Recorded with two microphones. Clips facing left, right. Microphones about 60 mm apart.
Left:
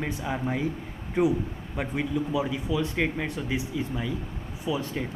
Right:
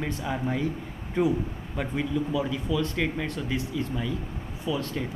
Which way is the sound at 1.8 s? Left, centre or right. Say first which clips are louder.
Even; centre.